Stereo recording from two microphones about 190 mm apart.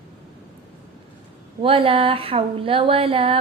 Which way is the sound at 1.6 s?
30° right (ahead or behind).